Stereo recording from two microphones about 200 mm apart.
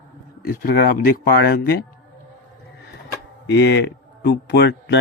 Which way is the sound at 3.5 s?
60° left (ahead or behind).